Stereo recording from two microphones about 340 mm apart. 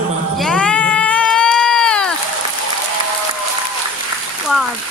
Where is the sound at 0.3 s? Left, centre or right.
Centre.